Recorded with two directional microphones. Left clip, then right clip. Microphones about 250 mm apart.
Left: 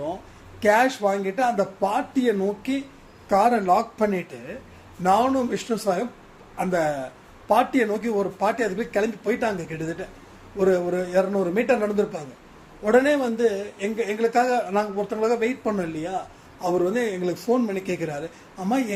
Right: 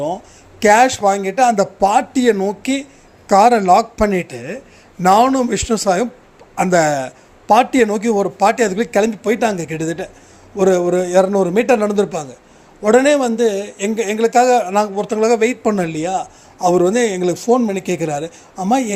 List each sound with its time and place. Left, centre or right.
0.6 s speech: right